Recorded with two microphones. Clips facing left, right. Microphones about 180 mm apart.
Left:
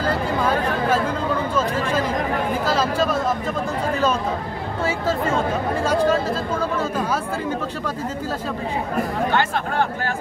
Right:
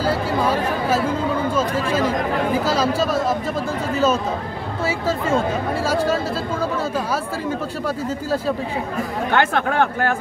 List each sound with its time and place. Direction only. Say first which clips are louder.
2.6 s speech: right 1 dB; 5° right (ahead or behind)
9.3 s speech: right 3 dB; 60° right (ahead or behind)